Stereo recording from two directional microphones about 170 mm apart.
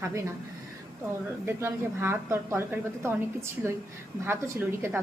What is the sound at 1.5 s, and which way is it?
A woman's voice, 15° right (ahead or behind).